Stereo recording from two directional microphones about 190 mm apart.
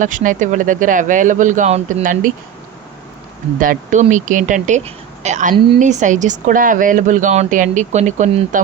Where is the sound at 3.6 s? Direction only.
45° right (ahead or behind).